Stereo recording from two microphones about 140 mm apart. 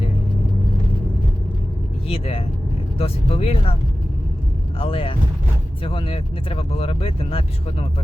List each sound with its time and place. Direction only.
2.0 s speech: 45° left (ahead or behind)
4.8 s speech: 40° left (ahead or behind)